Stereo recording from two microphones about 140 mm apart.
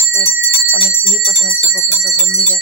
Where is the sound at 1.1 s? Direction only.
Centre (ahead or behind).